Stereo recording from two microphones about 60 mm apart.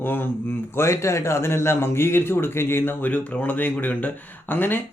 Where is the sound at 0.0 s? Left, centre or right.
Left.